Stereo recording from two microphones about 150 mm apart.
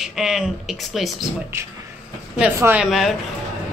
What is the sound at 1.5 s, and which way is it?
Speech, 15° right (ahead or behind).